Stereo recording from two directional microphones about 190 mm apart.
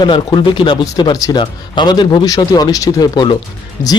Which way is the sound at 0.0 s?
25° left (ahead or behind).